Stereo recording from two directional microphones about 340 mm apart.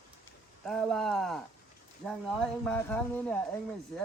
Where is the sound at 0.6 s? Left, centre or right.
Centre.